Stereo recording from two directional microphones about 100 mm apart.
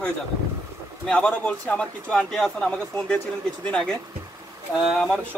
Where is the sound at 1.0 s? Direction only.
10° left (ahead or behind).